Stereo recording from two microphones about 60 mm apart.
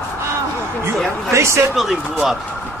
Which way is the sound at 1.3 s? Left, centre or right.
Right.